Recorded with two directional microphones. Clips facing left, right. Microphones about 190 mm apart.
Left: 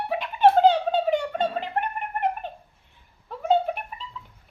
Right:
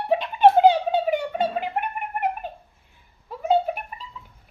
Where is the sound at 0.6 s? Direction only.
10° right (ahead or behind).